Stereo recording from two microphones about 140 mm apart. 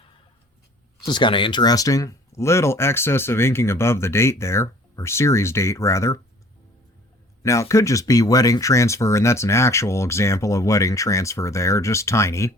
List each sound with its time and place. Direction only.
1.0 s speech: 35° left (ahead or behind)
7.4 s speech: 20° left (ahead or behind)